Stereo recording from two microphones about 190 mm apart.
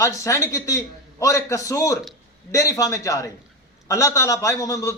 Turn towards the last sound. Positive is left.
turn(degrees=15)  # may be behind; listen again after turning